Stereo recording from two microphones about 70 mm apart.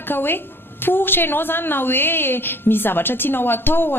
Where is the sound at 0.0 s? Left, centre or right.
Left.